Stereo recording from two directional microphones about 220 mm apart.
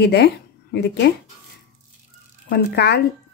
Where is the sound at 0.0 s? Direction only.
50° left (ahead or behind).